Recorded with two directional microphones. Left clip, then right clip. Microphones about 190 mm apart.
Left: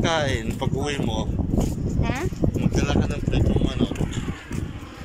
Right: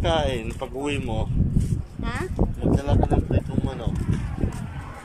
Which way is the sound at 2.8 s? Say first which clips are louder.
Right 1 dB; 40° right (ahead or behind).